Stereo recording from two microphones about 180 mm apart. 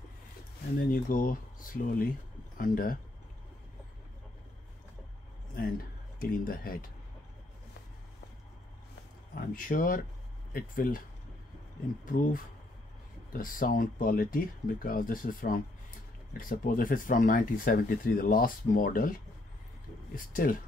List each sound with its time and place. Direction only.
0.7 s speech: 50° left (ahead or behind)
5.6 s speech: 50° left (ahead or behind)
9.3 s speech: 50° left (ahead or behind)
12.0 s speech: 50° left (ahead or behind)